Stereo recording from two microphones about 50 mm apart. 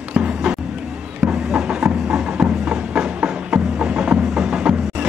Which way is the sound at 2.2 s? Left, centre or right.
Right.